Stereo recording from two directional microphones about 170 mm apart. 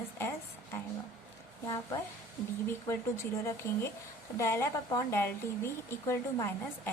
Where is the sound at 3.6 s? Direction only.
15° left (ahead or behind).